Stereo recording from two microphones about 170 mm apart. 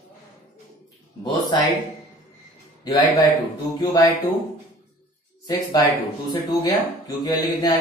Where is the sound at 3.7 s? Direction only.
20° left (ahead or behind).